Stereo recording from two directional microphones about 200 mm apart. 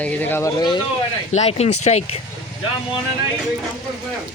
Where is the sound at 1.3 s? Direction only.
35° left (ahead or behind).